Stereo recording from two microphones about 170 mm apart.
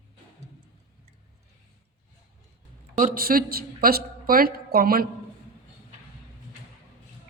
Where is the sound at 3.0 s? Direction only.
55° right (ahead or behind).